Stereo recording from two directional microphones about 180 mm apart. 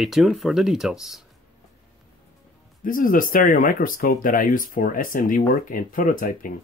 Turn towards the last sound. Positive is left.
turn(degrees=50)  # may be behind; listen again after turning